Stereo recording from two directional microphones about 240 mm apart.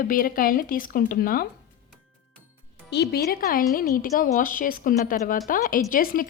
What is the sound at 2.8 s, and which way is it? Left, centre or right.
A woman's voice, left.